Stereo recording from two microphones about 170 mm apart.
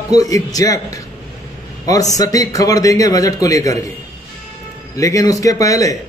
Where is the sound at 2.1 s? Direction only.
20° left (ahead or behind).